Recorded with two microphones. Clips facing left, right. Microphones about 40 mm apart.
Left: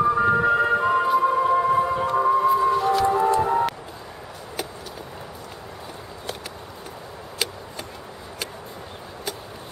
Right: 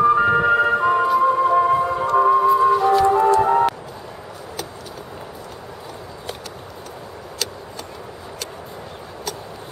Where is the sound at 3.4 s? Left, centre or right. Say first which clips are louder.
Right 5 dB; centre.